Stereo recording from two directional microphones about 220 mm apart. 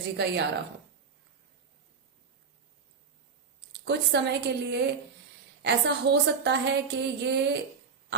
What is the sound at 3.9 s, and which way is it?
A woman's voice, 50° right (ahead or behind).